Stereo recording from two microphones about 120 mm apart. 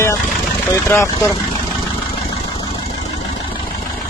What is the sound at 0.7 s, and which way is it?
Speech, 25° left (ahead or behind).